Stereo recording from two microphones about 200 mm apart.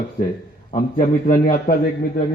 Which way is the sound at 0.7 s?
40° left (ahead or behind).